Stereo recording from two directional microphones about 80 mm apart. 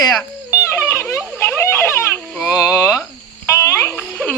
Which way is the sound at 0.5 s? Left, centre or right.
Left.